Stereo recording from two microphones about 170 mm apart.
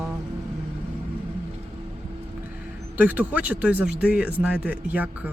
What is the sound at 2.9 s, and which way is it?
Speech, 10° right (ahead or behind).